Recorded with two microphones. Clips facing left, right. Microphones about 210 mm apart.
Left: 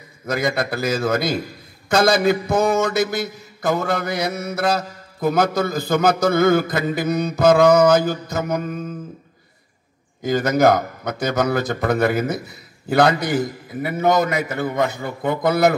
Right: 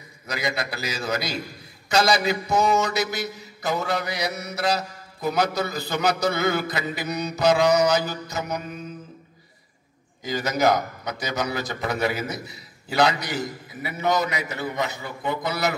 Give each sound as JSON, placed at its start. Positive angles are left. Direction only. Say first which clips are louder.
{"t": 0.3, "sound": "mantra", "louder": "left 7 dB", "side_deg": 50}
{"t": 10.2, "sound": "mantra", "louder": "left 6 dB", "side_deg": 50}